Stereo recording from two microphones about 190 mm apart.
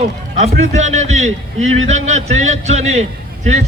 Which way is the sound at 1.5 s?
90° right.